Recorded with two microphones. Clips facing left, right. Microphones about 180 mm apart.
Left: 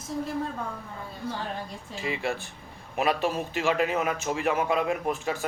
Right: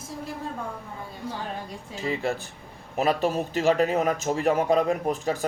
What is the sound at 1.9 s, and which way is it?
A man's voice, 40° right (ahead or behind).